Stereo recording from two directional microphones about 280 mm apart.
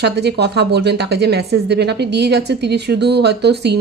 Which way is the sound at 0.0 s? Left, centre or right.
Right.